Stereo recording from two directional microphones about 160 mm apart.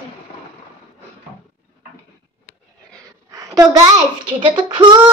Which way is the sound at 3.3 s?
20° right (ahead or behind).